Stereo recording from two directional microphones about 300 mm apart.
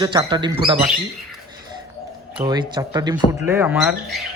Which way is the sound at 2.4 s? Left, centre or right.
Centre.